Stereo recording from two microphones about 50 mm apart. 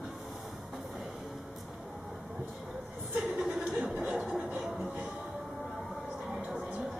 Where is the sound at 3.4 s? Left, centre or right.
Centre.